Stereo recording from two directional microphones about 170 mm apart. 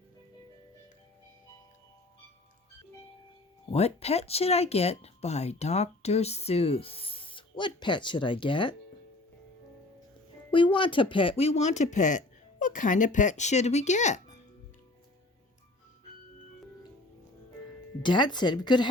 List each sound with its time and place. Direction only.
3.7 s speech: 40° left (ahead or behind)
10.5 s speech: 30° left (ahead or behind)
18.0 s speech: 25° left (ahead or behind)